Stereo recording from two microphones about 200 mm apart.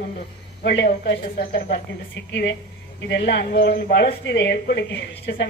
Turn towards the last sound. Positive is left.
turn(degrees=55)  # may be behind; listen again after turning